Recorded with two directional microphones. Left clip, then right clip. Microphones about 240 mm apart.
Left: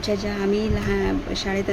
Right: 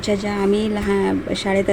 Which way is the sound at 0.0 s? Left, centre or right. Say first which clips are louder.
Right 4 dB; centre.